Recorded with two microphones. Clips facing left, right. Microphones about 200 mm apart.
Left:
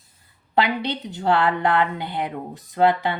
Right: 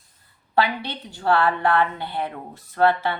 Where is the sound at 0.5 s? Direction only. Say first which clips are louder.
Left 1 dB; 20° left (ahead or behind).